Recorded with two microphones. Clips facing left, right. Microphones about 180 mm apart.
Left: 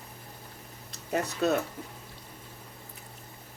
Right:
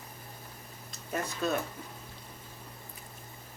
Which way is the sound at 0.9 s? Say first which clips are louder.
Left 5 dB; 65° left (ahead or behind).